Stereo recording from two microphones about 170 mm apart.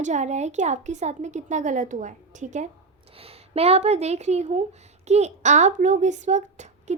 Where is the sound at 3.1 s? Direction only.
35° right (ahead or behind).